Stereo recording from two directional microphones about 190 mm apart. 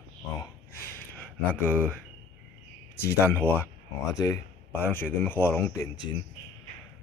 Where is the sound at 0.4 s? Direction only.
10° left (ahead or behind).